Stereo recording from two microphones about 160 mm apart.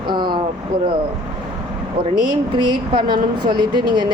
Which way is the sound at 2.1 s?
25° right (ahead or behind).